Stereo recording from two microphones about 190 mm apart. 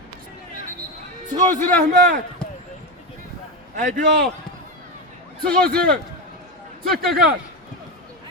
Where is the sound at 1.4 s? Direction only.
10° left (ahead or behind).